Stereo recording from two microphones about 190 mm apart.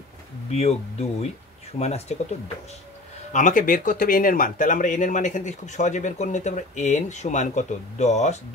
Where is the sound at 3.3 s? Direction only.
45° left (ahead or behind).